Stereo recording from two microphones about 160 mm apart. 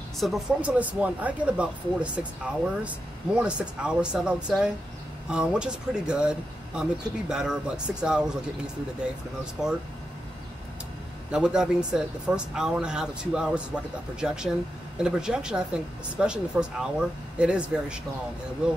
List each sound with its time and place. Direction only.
0.2 s speech: 5° right (ahead or behind)
9.4 s speech: 5° right (ahead or behind)
11.3 s speech: 5° right (ahead or behind)